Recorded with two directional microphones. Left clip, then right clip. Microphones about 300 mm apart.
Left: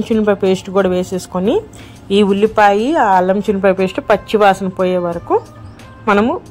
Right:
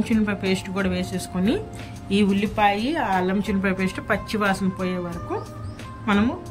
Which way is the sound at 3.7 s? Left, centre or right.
Centre.